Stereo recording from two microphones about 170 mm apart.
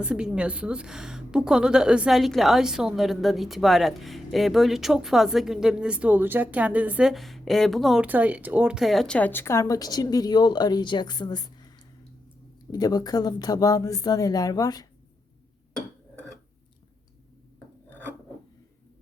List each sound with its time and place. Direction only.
0.0 s a woman's voice: 5° right (ahead or behind); by 14.8 s 20° left (ahead or behind)
17.8 s filing: 10° left (ahead or behind)